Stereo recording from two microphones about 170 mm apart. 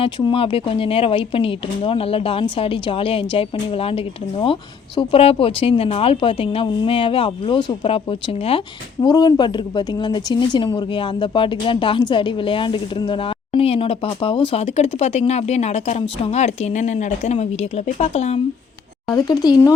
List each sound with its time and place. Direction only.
0.0 s a woman's voice: 30° left (ahead or behind)
19.1 s a woman's voice: 20° left (ahead or behind)